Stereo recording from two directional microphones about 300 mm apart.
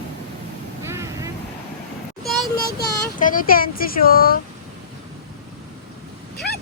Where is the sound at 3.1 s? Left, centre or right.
Left.